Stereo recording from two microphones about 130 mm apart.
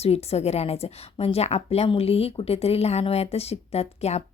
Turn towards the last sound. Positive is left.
turn(degrees=55)  # may be behind; listen again after turning